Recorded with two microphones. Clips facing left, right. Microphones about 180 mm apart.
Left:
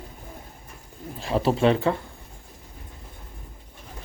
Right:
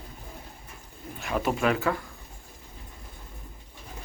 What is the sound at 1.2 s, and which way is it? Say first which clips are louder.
Speech: left 5 dB; 30° left (ahead or behind).